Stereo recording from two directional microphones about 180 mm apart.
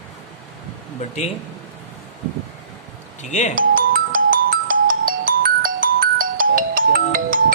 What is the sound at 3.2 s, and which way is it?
Speech, 40° left (ahead or behind).